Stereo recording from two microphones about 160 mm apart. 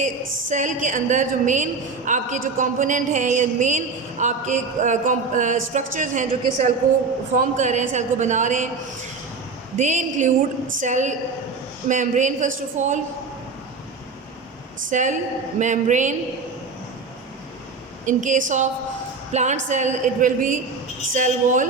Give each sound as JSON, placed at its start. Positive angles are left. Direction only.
{"t": 0.0, "sound": "a woman's voice", "side_deg": -50}
{"t": 9.7, "sound": "a woman's voice", "side_deg": -50}
{"t": 14.8, "sound": "a woman's voice", "side_deg": -50}
{"t": 18.0, "sound": "a woman's voice", "side_deg": -50}